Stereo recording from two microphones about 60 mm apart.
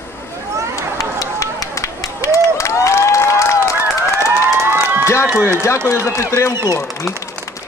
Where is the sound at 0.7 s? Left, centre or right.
Left.